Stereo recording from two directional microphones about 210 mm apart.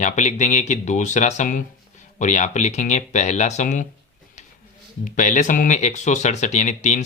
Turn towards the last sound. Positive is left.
turn(degrees=35)  # may be behind; listen again after turning